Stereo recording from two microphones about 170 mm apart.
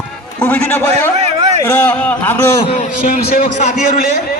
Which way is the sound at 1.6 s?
10° left (ahead or behind).